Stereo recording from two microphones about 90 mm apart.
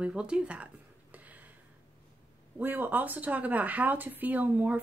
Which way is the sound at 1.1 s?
15° right (ahead or behind).